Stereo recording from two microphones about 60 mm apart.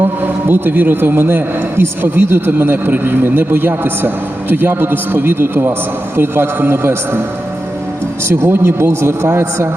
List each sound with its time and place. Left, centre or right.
0.0 s a man's voice: right
8.3 s a man's voice: right